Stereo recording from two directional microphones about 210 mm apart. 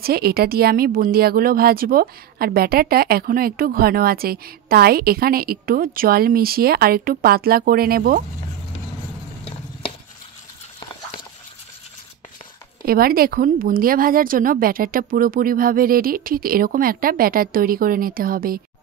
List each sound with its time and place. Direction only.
0.0 s a woman's voice: 45° right (ahead or behind)
12.8 s a woman's voice: 45° right (ahead or behind)